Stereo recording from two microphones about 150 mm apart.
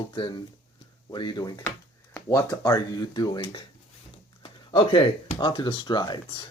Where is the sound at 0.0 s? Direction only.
30° left (ahead or behind).